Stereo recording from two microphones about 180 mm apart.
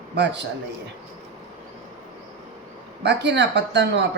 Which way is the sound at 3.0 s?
75° right (ahead or behind).